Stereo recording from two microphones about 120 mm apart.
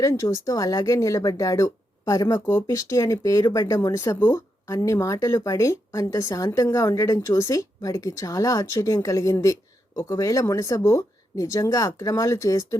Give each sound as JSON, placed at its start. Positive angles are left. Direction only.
{"t": 0.0, "sound": "speech", "side_deg": 25}